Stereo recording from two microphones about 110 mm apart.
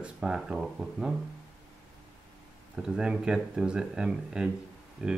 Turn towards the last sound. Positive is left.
turn(degrees=-10)  # may be behind; listen again after turning